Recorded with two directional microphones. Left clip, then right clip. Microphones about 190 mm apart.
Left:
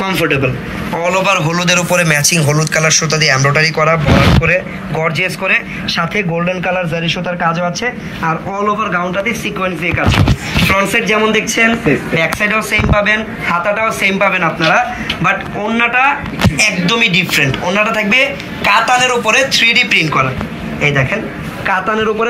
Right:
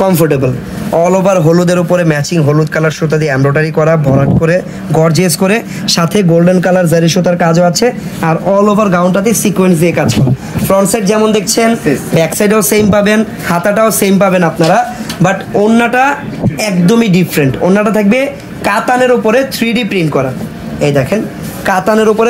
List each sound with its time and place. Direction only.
0.0 s a man's voice: 60° right (ahead or behind)
10.8 s a man's voice: 55° right (ahead or behind)
12.2 s speech: 70° right (ahead or behind)
20.8 s a man's voice: 40° right (ahead or behind)
21.6 s speech: 65° right (ahead or behind)